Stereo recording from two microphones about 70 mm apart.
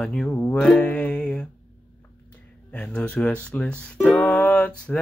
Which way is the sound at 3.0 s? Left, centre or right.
Centre.